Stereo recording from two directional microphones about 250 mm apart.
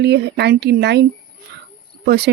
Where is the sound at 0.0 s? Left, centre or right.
Right.